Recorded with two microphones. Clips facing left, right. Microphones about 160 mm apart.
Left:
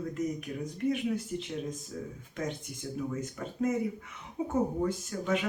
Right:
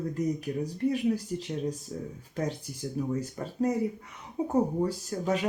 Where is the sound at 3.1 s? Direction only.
35° right (ahead or behind).